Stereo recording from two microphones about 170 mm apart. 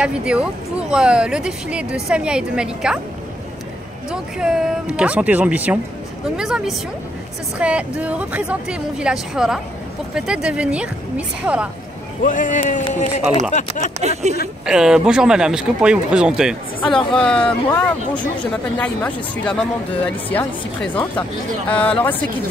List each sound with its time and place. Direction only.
0.0 s speech: 5° right (ahead or behind)
4.1 s speech: 5° right (ahead or behind)
12.2 s speech: 50° left (ahead or behind)
13.9 s speech: 40° right (ahead or behind)
14.7 s speech: 5° right (ahead or behind)